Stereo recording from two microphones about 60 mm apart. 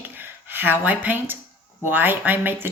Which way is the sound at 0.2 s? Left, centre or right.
Right.